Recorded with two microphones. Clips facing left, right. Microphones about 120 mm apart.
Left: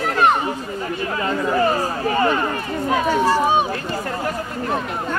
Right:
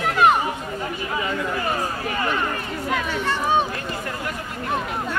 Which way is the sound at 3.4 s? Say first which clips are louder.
Left 3 dB; 15° left (ahead or behind).